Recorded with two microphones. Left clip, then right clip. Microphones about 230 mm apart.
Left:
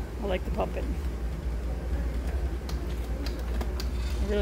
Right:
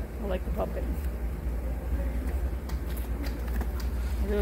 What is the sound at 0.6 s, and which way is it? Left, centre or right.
Speech, left.